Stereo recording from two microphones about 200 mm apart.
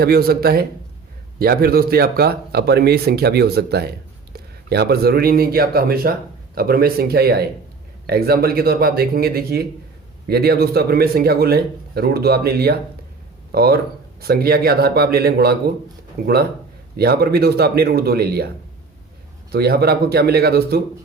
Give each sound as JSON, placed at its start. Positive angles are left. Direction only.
{"t": 0.0, "sound": "speech", "side_deg": -50}